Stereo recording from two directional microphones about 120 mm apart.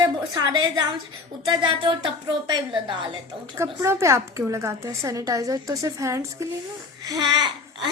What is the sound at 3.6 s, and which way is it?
A woman's voice, 25° right (ahead or behind).